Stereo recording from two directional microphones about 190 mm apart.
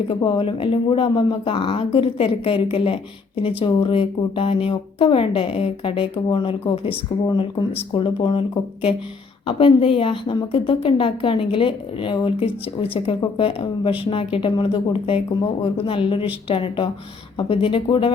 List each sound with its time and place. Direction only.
0.1 s speech: 25° left (ahead or behind)